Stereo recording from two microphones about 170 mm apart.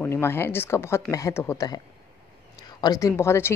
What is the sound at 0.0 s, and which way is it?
A woman's voice, 15° left (ahead or behind).